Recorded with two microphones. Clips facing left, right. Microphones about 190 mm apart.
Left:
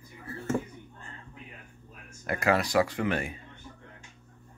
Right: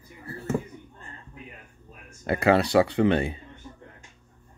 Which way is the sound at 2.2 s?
30° right (ahead or behind).